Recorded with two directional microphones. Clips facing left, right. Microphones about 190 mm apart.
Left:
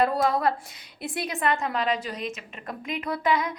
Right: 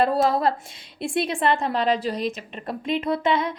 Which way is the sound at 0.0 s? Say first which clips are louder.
Right 3 dB; 30° right (ahead or behind).